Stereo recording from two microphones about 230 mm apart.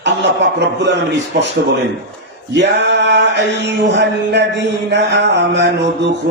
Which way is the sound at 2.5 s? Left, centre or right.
Right.